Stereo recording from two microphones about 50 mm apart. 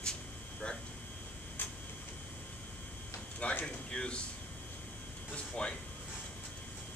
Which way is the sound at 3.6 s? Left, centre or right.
Centre.